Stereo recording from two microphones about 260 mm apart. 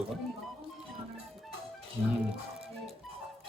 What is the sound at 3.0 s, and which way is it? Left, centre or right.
Music, centre.